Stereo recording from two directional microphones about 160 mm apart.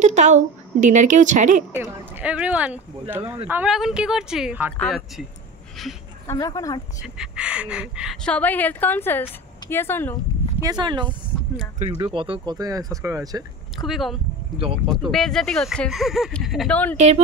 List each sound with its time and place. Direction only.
0.0 s a woman's voice: 50° right (ahead or behind)
1.7 s speech: 10° right (ahead or behind)
4.7 s speech: 5° left (ahead or behind)
6.2 s speech: 20° left (ahead or behind)
7.0 s speech: 5° right (ahead or behind); by 10.1 s 15° left (ahead or behind)
10.6 s speech: 25° right (ahead or behind)
13.7 s speech: centre (ahead or behind)
16.9 s speech: 45° right (ahead or behind)